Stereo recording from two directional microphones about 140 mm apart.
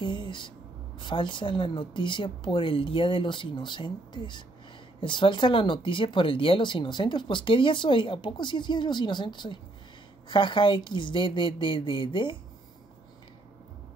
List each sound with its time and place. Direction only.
0.0 s music: 35° left (ahead or behind)
0.9 s speech: 35° left (ahead or behind)